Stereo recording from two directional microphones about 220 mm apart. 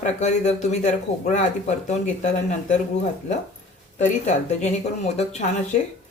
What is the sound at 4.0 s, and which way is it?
Speech, 30° left (ahead or behind).